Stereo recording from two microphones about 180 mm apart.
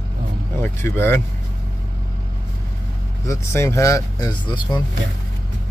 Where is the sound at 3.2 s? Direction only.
15° left (ahead or behind).